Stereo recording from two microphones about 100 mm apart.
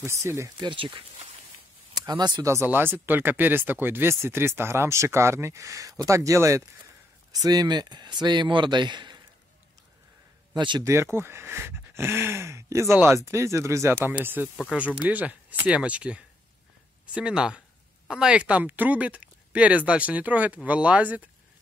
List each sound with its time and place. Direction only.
0.0 s speech: 30° right (ahead or behind)
0.6 s speech: 50° right (ahead or behind)
2.0 s speech: 45° right (ahead or behind)
2.4 s a man's voice: 25° right (ahead or behind); by 9.2 s 50° right (ahead or behind)
10.5 s speech: 50° right (ahead or behind)
10.8 s speech: 30° right (ahead or behind)